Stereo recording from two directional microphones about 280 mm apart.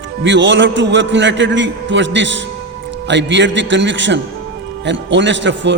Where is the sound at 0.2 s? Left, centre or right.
Right.